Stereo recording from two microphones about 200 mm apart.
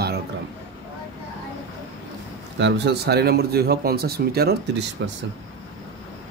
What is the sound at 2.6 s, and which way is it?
Speech, 55° right (ahead or behind).